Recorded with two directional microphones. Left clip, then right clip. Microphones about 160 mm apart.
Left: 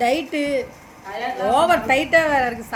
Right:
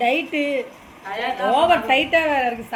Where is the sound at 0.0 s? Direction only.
20° left (ahead or behind).